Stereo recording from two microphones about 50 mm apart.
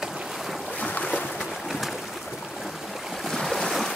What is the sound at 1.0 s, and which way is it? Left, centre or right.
Boat, centre.